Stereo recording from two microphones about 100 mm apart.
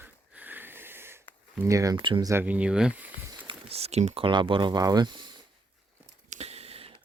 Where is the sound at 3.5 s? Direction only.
80° right.